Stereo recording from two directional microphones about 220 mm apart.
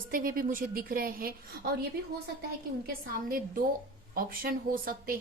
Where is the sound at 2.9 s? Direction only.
40° right (ahead or behind).